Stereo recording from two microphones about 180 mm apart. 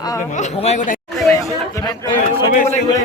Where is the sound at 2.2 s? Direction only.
40° left (ahead or behind).